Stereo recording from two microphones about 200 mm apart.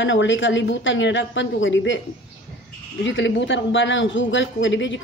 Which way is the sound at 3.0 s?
70° left (ahead or behind).